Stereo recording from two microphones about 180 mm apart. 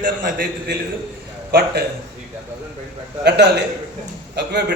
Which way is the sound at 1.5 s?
60° right (ahead or behind).